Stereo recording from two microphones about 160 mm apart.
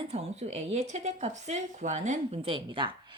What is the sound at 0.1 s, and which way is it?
A woman's voice, 40° right (ahead or behind).